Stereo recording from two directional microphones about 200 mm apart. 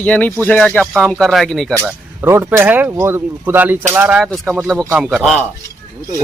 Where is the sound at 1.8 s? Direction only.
10° right (ahead or behind).